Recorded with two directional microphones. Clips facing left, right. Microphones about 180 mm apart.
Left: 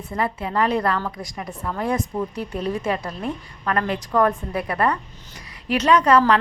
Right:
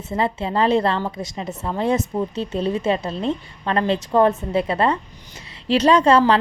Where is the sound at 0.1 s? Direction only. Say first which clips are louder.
Right 3 dB; 25° right (ahead or behind).